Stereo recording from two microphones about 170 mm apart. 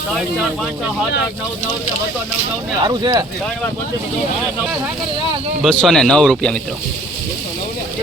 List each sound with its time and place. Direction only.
2.8 s speech: 25° right (ahead or behind)
5.6 s speech: 5° left (ahead or behind)